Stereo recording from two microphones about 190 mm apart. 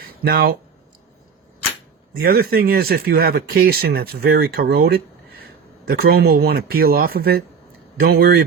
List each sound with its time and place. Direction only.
0.2 s speech: 55° right (ahead or behind)
2.2 s speech: 50° right (ahead or behind)